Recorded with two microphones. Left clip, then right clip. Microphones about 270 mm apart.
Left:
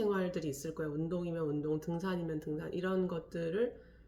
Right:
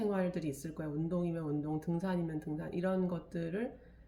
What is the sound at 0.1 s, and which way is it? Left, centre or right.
Speech, centre.